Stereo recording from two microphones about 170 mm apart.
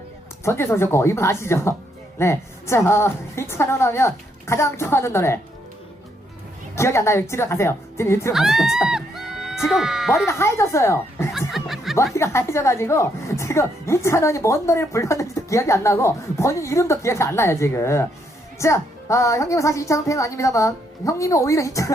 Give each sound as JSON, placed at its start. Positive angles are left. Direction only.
{"t": 0.4, "sound": "a woman's voice", "side_deg": 15}
{"t": 6.7, "sound": "a woman's voice", "side_deg": 15}
{"t": 8.3, "sound": "speech", "side_deg": 0}
{"t": 10.2, "sound": "a woman's voice", "side_deg": 15}
{"t": 11.3, "sound": "speech", "side_deg": 0}
{"t": 12.1, "sound": "a woman's voice", "side_deg": 15}